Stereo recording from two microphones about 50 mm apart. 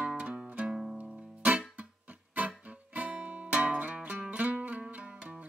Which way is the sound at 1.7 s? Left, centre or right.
Right.